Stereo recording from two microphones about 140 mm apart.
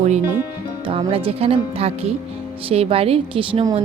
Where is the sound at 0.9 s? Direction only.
40° right (ahead or behind).